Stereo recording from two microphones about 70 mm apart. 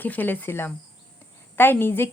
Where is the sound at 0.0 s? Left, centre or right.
Left.